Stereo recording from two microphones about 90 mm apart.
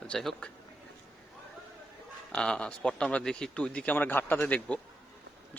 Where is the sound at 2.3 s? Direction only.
10° left (ahead or behind).